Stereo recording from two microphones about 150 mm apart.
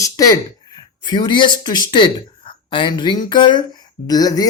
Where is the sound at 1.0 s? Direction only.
30° left (ahead or behind).